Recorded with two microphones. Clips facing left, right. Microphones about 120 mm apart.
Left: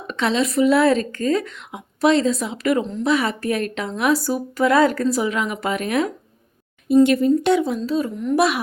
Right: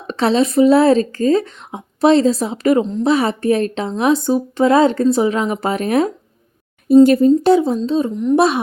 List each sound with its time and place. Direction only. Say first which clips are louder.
0.1 s a woman's voice: right 5 dB; 35° right (ahead or behind)